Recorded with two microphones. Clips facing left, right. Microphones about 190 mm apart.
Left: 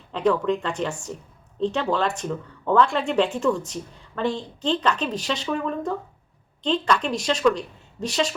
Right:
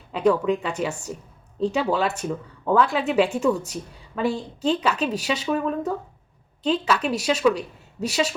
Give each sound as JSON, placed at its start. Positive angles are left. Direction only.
{"t": 0.1, "sound": "speech", "side_deg": -10}